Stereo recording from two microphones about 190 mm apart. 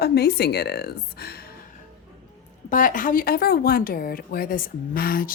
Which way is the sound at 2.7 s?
45° left (ahead or behind).